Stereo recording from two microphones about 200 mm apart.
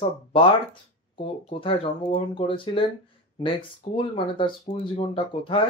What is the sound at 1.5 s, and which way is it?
Speech, 25° left (ahead or behind).